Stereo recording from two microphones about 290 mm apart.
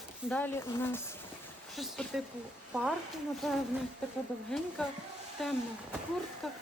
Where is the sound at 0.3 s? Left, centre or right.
Centre.